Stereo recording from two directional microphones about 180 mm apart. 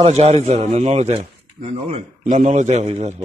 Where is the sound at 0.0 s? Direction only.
35° right (ahead or behind).